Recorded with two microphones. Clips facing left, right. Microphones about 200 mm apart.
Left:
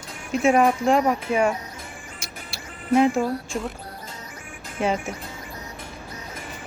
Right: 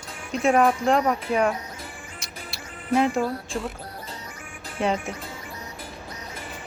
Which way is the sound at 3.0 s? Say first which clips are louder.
Left 3 dB; 5° left (ahead or behind).